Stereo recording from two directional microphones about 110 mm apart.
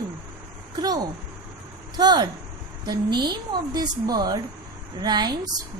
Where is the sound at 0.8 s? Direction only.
35° right (ahead or behind).